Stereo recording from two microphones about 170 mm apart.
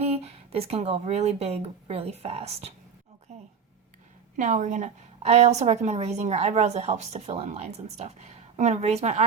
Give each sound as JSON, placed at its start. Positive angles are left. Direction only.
{"t": 0.0, "sound": "speech", "side_deg": -35}
{"t": 4.4, "sound": "a woman's voice", "side_deg": -45}